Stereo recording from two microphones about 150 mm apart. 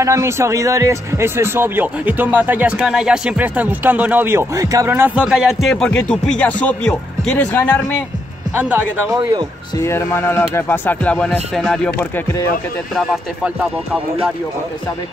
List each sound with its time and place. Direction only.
0.0 s speech: 20° right (ahead or behind); by 7.8 s 10° left (ahead or behind)
9.1 s speech: 25° right (ahead or behind)
9.8 s speech: 15° left (ahead or behind)
12.9 s speech: centre (ahead or behind)